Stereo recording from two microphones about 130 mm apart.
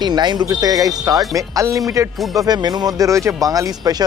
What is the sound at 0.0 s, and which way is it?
Speech, 35° right (ahead or behind).